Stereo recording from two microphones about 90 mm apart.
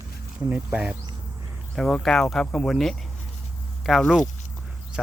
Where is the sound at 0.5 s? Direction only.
15° right (ahead or behind).